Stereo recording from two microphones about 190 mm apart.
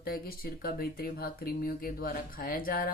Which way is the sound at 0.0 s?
50° left (ahead or behind).